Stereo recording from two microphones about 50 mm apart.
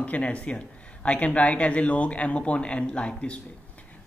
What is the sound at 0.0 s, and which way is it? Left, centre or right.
Speech, left.